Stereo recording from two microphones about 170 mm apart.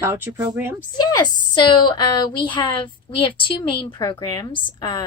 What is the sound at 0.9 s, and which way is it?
A woman's voice, 25° left (ahead or behind).